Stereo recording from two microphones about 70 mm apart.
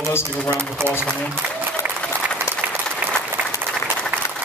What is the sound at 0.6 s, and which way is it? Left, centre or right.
Speech, right.